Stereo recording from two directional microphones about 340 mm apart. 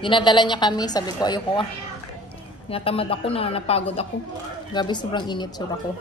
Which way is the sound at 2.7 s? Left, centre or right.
Centre.